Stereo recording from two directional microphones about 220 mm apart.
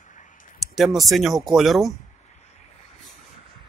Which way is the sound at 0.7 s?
Centre (ahead or behind).